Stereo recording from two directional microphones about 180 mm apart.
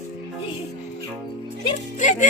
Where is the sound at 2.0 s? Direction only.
45° left (ahead or behind).